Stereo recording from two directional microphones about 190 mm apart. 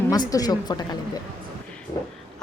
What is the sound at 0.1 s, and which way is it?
A woman's voice, 20° left (ahead or behind).